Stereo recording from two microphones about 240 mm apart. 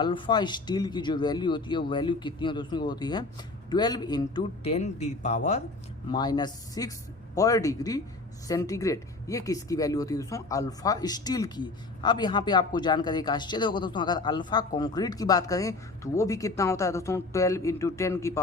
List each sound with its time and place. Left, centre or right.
0.0 s a man's voice: centre
6.1 s speech: centre